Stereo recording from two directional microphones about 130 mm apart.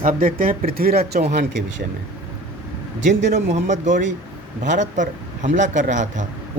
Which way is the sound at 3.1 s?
65° right (ahead or behind).